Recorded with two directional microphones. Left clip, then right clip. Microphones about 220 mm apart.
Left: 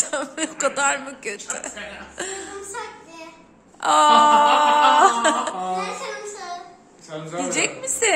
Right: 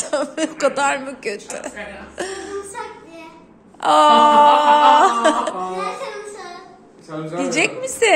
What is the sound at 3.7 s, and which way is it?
Wail, centre (ahead or behind).